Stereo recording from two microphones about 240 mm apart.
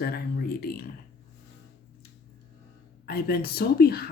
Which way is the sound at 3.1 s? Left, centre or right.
Left.